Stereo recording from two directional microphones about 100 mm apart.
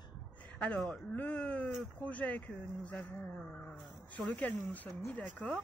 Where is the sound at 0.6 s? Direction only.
15° left (ahead or behind).